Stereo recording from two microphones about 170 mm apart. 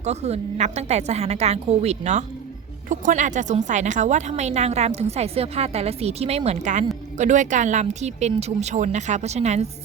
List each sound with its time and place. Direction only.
0.0 s a woman's voice: 40° right (ahead or behind)